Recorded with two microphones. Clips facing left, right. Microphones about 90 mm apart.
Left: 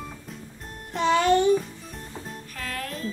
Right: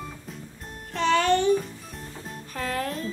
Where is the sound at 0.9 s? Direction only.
15° left (ahead or behind).